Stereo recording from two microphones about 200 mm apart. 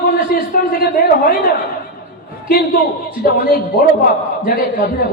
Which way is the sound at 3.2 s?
45° left (ahead or behind).